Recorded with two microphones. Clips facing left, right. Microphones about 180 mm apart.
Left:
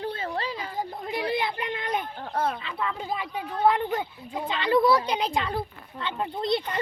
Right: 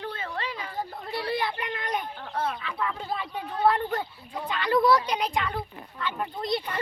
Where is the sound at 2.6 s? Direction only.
25° left (ahead or behind).